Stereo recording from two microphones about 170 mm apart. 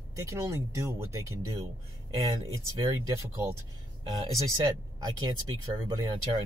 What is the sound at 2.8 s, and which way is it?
Speech, 20° right (ahead or behind).